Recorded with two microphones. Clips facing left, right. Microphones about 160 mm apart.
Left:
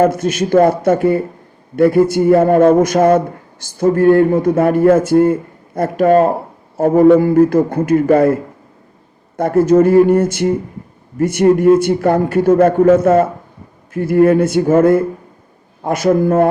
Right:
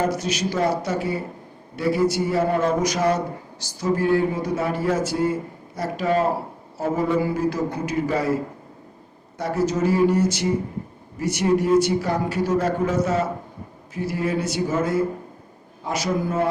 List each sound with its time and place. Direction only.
0.0 s a man's voice: 50° left (ahead or behind)
9.4 s a man's voice: 55° left (ahead or behind)